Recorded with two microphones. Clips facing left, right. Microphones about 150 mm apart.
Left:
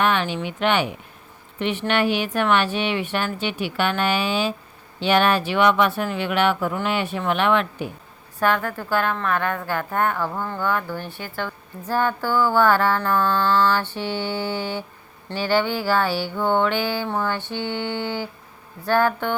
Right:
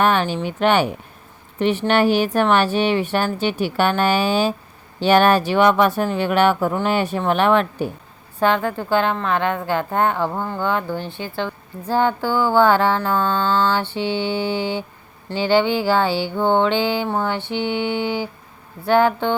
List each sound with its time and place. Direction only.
0.0 s a woman's voice: 40° right (ahead or behind)
8.4 s mantra: 20° right (ahead or behind)